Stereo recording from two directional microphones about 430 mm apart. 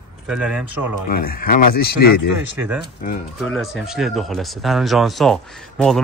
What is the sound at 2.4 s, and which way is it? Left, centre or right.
Speech, centre.